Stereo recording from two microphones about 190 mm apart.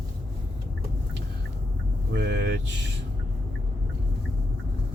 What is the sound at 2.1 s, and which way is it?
Speech, 65° right (ahead or behind).